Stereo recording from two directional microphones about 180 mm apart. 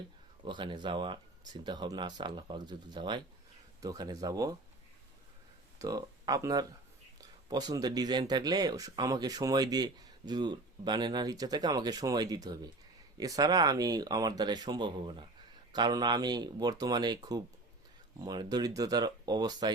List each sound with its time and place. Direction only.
0.4 s speech: 25° right (ahead or behind)
5.8 s speech: 20° right (ahead or behind)